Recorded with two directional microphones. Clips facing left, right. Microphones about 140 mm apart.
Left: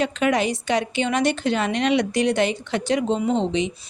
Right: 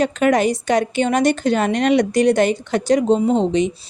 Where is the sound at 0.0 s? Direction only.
45° right (ahead or behind).